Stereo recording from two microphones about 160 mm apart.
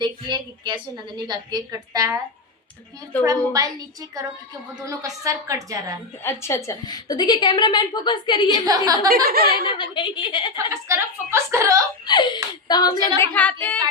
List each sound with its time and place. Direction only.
0.0 s a woman's voice: 30° right (ahead or behind)
3.2 s a woman's voice: 20° right (ahead or behind)
6.2 s a woman's voice: 20° left (ahead or behind)
8.4 s a woman's voice: 25° right (ahead or behind)
9.0 s speech: 70° right (ahead or behind)
9.6 s a woman's voice: 30° left (ahead or behind)
10.7 s a woman's voice: 15° right (ahead or behind)
12.0 s a woman's voice: 30° left (ahead or behind)
13.1 s a woman's voice: 10° left (ahead or behind)